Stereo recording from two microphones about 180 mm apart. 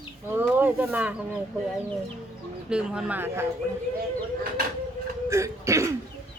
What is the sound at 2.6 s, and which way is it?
Speech, 5° right (ahead or behind).